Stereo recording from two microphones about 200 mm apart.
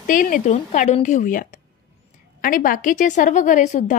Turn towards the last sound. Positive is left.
turn(degrees=40)  # may be behind; listen again after turning